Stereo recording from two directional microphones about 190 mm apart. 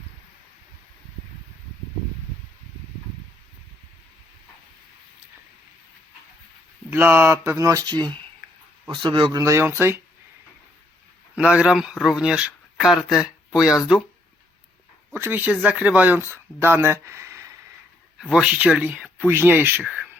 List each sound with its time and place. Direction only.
6.9 s a man's voice: 10° right (ahead or behind)
9.4 s speech: 15° right (ahead or behind)
11.3 s speech: 5° right (ahead or behind)
15.1 s speech: 10° right (ahead or behind)
18.2 s speech: 5° right (ahead or behind)